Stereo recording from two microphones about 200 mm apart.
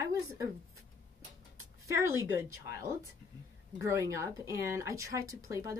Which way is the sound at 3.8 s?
15° right (ahead or behind).